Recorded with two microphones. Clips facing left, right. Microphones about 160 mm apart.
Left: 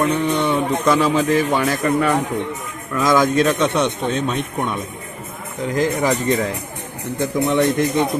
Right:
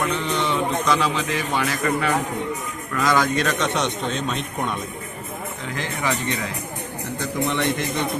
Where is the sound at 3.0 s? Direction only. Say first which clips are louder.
Left 5 dB; 45° left (ahead or behind).